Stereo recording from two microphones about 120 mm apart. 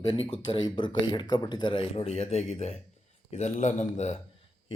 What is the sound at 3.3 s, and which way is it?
Speech, 80° left.